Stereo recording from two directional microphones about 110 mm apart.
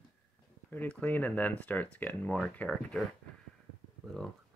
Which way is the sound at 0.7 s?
15° left (ahead or behind).